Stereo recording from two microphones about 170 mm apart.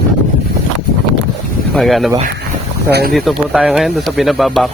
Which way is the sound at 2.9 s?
65° right (ahead or behind).